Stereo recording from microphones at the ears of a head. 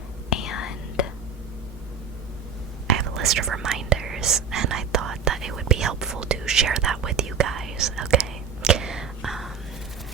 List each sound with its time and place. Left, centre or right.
0.3 s whispering: left
2.8 s whispering: right